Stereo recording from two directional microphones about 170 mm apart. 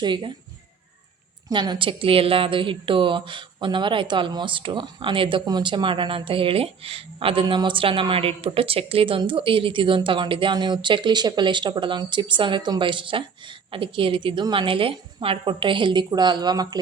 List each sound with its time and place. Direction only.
0.0 s speech: 25° right (ahead or behind)
1.5 s speech: 25° right (ahead or behind)